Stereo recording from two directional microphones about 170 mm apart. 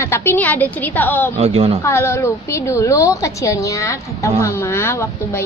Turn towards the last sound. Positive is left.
turn(degrees=15)  # may be behind; listen again after turning